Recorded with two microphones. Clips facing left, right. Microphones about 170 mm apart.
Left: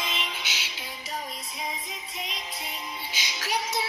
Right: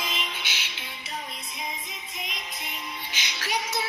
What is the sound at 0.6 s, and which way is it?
Music, 35° left (ahead or behind).